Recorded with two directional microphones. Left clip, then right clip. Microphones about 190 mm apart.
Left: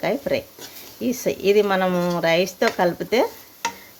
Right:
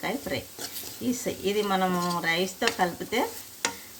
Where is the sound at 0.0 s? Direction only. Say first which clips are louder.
Left 9 dB; 50° left (ahead or behind).